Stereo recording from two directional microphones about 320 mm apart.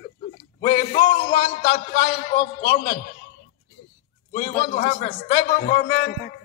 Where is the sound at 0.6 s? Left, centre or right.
Left.